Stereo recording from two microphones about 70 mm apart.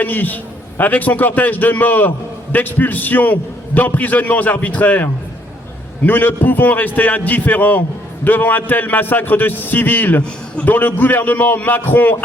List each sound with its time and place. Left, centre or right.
0.0 s a man's voice: left
6.1 s a man's voice: left